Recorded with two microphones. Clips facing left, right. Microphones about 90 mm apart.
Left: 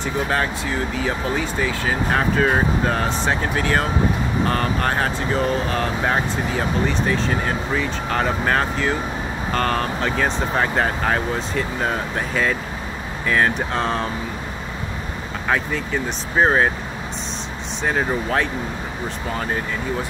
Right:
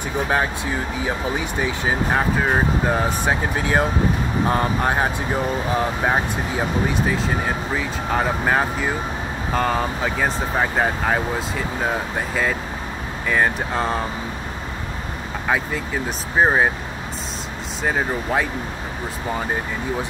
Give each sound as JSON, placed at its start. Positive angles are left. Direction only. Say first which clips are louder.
{"t": 0.0, "sound": "speech", "louder": "even", "side_deg": -15}
{"t": 2.1, "sound": "speech", "louder": "left 3 dB", "side_deg": -10}
{"t": 15.4, "sound": "speech", "louder": "left 1 dB", "side_deg": -5}
{"t": 17.8, "sound": "speech", "louder": "left 1 dB", "side_deg": -5}